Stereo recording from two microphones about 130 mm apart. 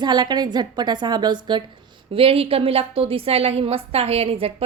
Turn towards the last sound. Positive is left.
turn(degrees=-50)  # may be behind; listen again after turning